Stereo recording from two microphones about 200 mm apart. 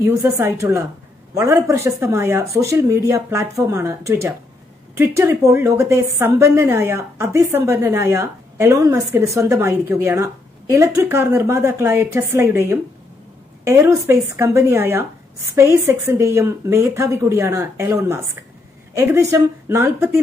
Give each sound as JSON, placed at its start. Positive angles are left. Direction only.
{"t": 0.0, "sound": "a woman's voice", "side_deg": -15}